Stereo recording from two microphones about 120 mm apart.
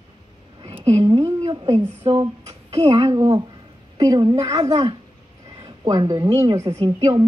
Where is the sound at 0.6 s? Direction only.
45° right (ahead or behind).